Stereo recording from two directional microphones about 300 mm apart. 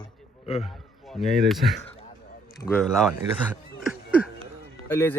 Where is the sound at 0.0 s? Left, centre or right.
Centre.